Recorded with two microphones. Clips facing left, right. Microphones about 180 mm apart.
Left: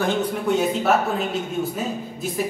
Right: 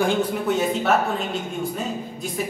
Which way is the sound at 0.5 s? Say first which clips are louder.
Left 2 dB; centre (ahead or behind).